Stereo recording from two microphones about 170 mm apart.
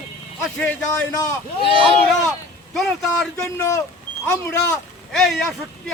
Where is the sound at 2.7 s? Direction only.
Centre (ahead or behind).